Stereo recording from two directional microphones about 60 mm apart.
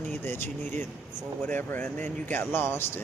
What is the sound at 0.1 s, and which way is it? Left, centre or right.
Speech, left.